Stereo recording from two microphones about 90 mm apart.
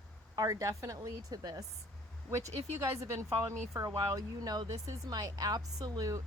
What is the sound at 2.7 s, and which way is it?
Speech, 30° right (ahead or behind).